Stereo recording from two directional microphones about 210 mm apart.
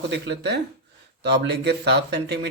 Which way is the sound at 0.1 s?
55° right (ahead or behind).